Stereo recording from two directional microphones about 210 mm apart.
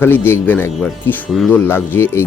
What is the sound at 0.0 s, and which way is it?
Speech, 10° left (ahead or behind).